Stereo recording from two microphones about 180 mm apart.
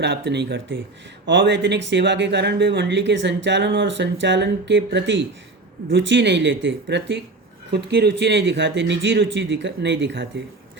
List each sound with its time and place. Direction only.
0.0 s speech: 70° right (ahead or behind)
1.3 s speech: 85° right